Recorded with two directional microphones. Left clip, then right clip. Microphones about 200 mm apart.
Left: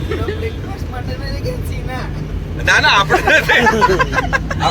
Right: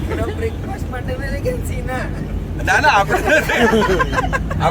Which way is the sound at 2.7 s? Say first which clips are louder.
Left 2 dB; 40° right (ahead or behind).